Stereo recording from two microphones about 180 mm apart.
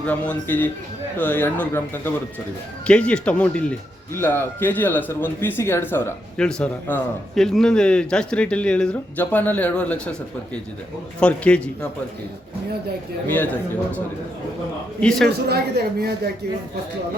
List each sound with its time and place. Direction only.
0.0 s a man's voice: 10° left (ahead or behind)
11.2 s a man's voice: 5° left (ahead or behind)
13.2 s a man's voice: 10° left (ahead or behind)
15.3 s a woman's voice: 60° right (ahead or behind)